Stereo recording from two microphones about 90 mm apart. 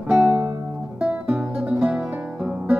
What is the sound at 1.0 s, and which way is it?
Music, 10° right (ahead or behind).